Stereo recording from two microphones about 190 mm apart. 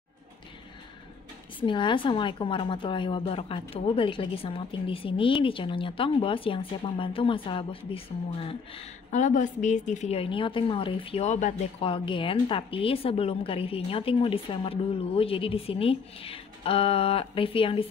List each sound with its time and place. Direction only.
1.6 s a woman's voice: 25° left (ahead or behind)